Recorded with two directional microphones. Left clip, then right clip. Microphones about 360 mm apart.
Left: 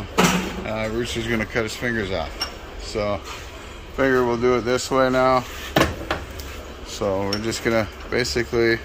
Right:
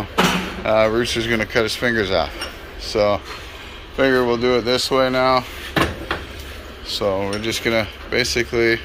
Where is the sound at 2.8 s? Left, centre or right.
Centre.